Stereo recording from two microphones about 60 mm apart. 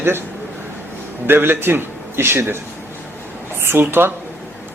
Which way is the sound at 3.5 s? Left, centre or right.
Right.